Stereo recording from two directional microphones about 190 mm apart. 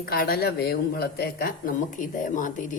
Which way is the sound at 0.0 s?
55° left (ahead or behind).